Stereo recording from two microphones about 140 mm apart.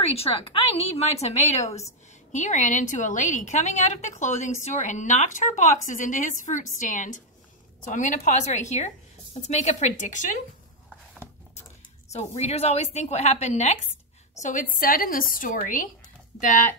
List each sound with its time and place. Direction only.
0.0 s a woman's voice: 45° left (ahead or behind); by 10.4 s 60° left (ahead or behind)
12.1 s a woman's voice: 50° left (ahead or behind)
14.4 s a woman's voice: 70° left (ahead or behind)